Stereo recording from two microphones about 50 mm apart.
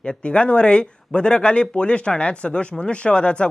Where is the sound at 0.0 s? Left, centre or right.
Left.